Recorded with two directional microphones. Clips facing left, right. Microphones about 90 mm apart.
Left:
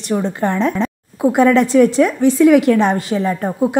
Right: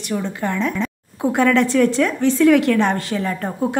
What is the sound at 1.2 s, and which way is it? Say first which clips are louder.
A woman's voice: left 4 dB; 15° left (ahead or behind).